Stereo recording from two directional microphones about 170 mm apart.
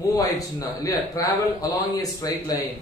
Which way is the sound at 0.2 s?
20° left (ahead or behind).